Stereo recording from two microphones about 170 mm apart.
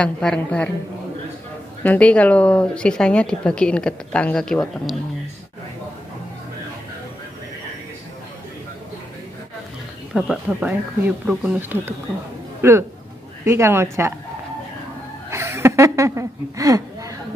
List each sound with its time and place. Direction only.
0.0 s speech: 5° left (ahead or behind)
1.8 s speech: 10° left (ahead or behind)
10.1 s speech: 5° right (ahead or behind)
15.3 s a sound: 15° right (ahead or behind)